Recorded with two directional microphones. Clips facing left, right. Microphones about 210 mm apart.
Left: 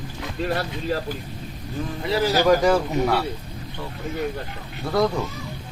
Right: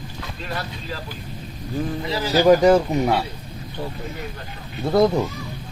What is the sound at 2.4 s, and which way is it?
Speech, 20° right (ahead or behind).